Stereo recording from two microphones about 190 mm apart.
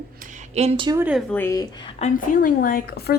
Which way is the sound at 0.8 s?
10° right (ahead or behind).